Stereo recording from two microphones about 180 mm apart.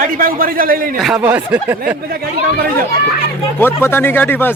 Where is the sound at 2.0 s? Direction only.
55° right (ahead or behind).